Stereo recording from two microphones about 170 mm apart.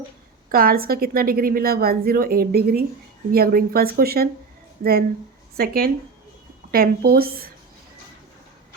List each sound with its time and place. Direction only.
0.5 s a woman's voice: 60° right (ahead or behind)